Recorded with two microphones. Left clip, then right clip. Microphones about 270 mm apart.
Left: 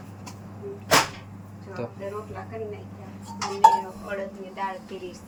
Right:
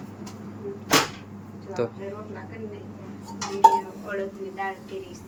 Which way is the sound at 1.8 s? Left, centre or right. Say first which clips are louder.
Right 7 dB; centre.